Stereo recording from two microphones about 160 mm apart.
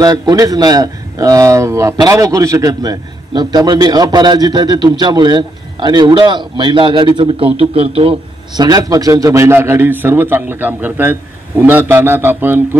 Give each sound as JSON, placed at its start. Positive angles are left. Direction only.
{"t": 0.0, "sound": "a man's voice", "side_deg": -25}